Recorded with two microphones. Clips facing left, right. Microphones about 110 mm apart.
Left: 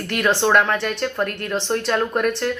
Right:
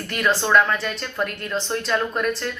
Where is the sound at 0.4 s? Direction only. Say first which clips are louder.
Left 1 dB; 60° left (ahead or behind).